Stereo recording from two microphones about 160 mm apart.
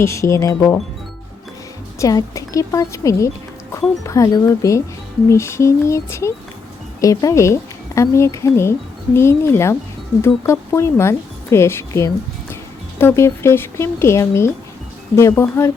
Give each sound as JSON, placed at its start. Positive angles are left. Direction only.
{"t": 0.0, "sound": "speech", "side_deg": 20}
{"t": 2.0, "sound": "speech", "side_deg": 20}